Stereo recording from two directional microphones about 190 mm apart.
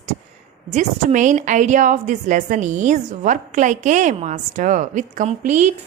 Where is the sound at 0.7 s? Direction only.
40° right (ahead or behind).